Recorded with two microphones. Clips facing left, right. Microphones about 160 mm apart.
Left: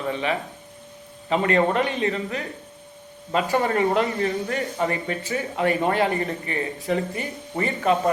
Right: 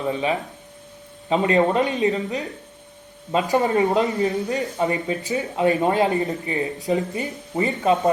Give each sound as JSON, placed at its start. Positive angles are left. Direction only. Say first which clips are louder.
{"t": 0.0, "sound": "speech", "louder": "right 2 dB", "side_deg": -20}
{"t": 3.5, "sound": "speech", "louder": "right 2 dB", "side_deg": -20}